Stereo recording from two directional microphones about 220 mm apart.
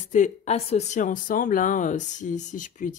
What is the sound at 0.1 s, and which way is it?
Speech, 30° left (ahead or behind).